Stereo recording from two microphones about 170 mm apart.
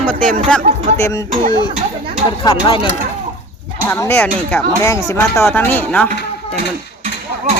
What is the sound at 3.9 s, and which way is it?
Speech, 10° left (ahead or behind).